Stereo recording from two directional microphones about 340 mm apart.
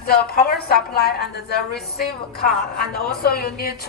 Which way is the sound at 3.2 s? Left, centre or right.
Left.